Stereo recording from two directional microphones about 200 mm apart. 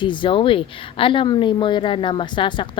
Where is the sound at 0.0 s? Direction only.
25° left (ahead or behind).